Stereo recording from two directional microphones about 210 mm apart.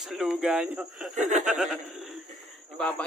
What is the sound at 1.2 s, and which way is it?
Speech, 35° right (ahead or behind).